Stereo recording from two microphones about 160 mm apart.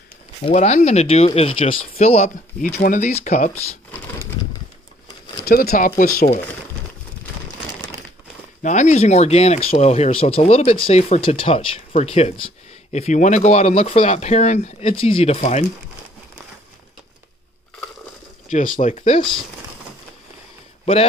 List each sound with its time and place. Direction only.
0.4 s speech: 40° left (ahead or behind)
5.4 s speech: 70° left (ahead or behind)
8.6 s speech: 50° left (ahead or behind)
18.5 s speech: 55° left (ahead or behind)
20.8 s a man's voice: 35° left (ahead or behind)